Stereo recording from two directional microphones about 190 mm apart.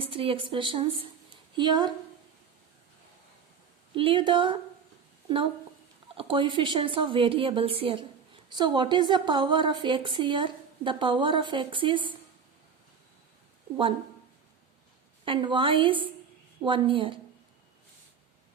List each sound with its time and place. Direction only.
0.0 s a woman's voice: 30° right (ahead or behind)
3.9 s a woman's voice: 25° right (ahead or behind)
6.1 s a woman's voice: 25° right (ahead or behind)
15.2 s a woman's voice: 25° right (ahead or behind)